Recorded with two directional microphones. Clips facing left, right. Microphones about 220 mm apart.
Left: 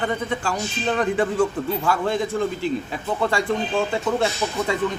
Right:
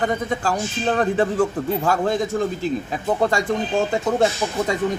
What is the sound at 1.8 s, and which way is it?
Speech, 45° right (ahead or behind).